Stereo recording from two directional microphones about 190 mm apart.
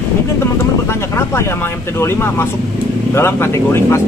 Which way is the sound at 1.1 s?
15° left (ahead or behind).